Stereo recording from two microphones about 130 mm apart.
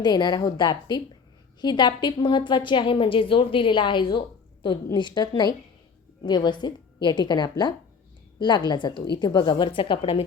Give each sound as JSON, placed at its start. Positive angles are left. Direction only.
{"t": 0.0, "sound": "a woman's voice", "side_deg": 35}